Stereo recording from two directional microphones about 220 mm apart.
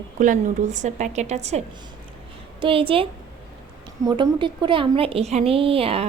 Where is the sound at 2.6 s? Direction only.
25° right (ahead or behind).